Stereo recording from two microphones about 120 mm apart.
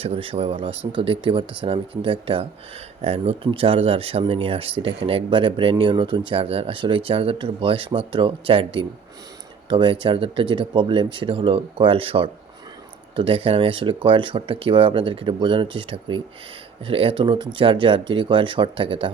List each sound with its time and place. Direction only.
0.0 s speech: 50° right (ahead or behind)